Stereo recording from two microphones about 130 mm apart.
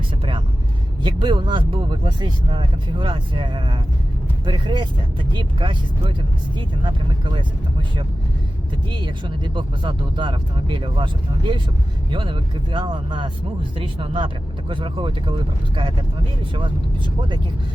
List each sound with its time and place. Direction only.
1.0 s speech: 40° right (ahead or behind)